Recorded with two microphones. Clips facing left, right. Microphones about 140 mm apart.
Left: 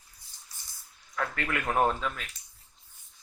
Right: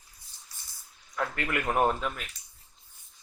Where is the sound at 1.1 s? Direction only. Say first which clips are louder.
Right 1 dB; 10° right (ahead or behind).